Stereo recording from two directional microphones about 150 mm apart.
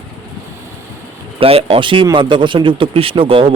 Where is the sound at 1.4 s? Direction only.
40° right (ahead or behind).